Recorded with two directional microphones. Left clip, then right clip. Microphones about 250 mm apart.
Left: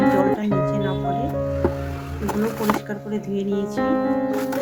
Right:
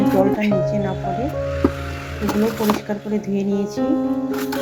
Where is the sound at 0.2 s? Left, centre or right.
Centre.